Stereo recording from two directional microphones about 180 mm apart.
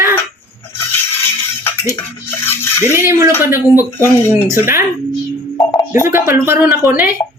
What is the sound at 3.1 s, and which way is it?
Speech, 15° right (ahead or behind).